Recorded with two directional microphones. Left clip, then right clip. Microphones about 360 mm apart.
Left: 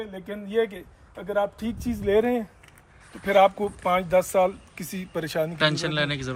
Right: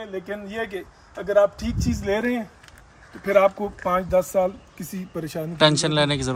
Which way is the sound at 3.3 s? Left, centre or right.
Centre.